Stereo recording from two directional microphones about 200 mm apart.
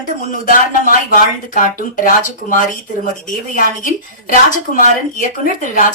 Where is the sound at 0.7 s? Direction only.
40° left (ahead or behind).